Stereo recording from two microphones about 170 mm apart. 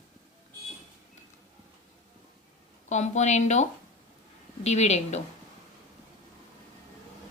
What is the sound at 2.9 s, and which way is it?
A woman's voice, 45° left (ahead or behind).